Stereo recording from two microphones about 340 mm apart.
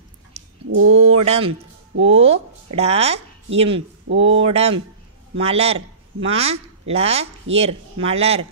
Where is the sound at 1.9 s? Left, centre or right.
Right.